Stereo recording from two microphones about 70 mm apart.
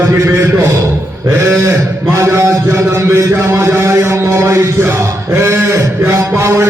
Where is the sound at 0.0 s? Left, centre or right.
Right.